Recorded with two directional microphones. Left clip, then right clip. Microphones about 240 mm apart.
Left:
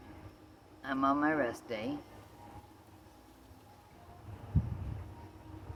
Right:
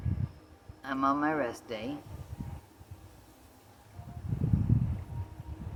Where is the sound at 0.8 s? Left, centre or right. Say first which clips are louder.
Right 2 dB; centre.